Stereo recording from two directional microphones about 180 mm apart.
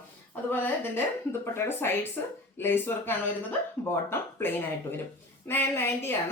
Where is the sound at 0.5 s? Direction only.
10° left (ahead or behind).